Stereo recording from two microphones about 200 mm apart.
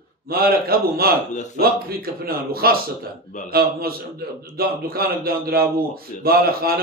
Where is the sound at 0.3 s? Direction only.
50° right (ahead or behind).